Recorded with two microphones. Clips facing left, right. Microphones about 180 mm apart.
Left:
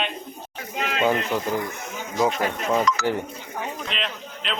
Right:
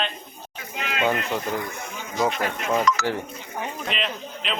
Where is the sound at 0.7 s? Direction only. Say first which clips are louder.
Left 3 dB; 40° left (ahead or behind).